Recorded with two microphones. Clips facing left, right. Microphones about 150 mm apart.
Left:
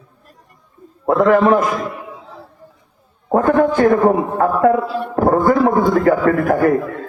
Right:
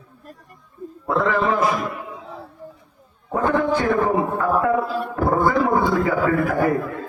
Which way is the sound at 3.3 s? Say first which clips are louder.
Left 6 dB; 50° left (ahead or behind).